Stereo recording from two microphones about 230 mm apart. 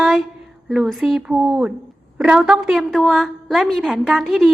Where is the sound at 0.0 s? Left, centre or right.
Centre.